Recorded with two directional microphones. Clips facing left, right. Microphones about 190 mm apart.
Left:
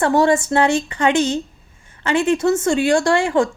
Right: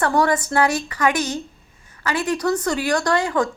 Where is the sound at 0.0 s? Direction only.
25° left (ahead or behind).